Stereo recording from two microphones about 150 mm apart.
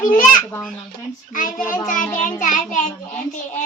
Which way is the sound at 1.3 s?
65° left (ahead or behind).